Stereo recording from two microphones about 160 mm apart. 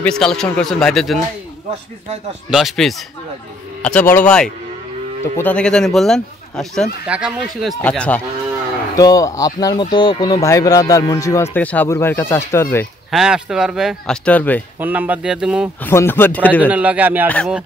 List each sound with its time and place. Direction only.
0.0 s speech: 5° left (ahead or behind)
2.5 s speech: centre (ahead or behind)
7.8 s speech: 10° left (ahead or behind)
8.9 s speech: 20° left (ahead or behind)
13.1 s speech: 5° right (ahead or behind)
14.8 s speech: 10° right (ahead or behind)
15.8 s speech: 15° left (ahead or behind)
16.6 s speech: 10° right (ahead or behind)